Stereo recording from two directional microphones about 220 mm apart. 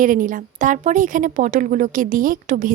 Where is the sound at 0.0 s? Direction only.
35° right (ahead or behind).